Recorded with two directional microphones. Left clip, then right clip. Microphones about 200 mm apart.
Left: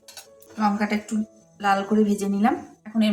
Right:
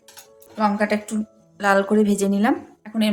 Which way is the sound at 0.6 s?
35° right (ahead or behind).